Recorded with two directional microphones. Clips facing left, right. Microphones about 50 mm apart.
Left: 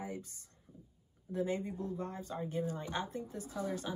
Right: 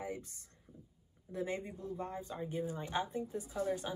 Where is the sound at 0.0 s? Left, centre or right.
Right.